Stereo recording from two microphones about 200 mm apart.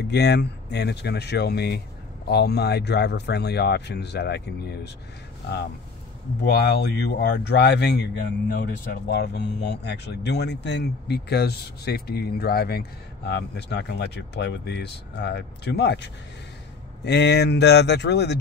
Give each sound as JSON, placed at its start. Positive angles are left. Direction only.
{"t": 0.1, "sound": "speech", "side_deg": 60}
{"t": 6.4, "sound": "speech", "side_deg": 55}